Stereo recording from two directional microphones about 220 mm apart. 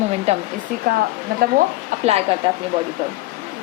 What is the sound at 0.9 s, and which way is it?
Speech, 40° right (ahead or behind).